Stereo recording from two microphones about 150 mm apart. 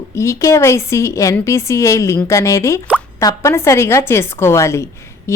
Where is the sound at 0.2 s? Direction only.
20° left (ahead or behind).